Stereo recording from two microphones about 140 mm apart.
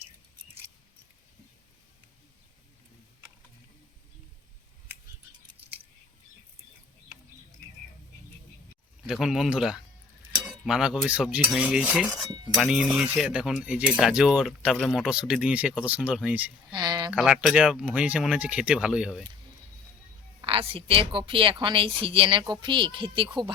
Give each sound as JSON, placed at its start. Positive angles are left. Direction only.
{"t": 9.0, "sound": "speech", "side_deg": 0}
{"t": 16.7, "sound": "a sound", "side_deg": -30}
{"t": 17.1, "sound": "speech", "side_deg": -5}
{"t": 20.4, "sound": "a woman's voice", "side_deg": -40}